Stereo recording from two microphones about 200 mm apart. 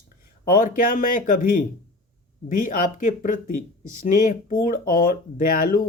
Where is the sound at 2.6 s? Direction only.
40° left (ahead or behind).